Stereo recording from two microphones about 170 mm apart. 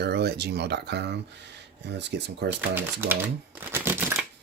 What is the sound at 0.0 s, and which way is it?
Speech, 75° right (ahead or behind).